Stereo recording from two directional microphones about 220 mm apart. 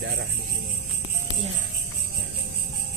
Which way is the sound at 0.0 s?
55° right (ahead or behind).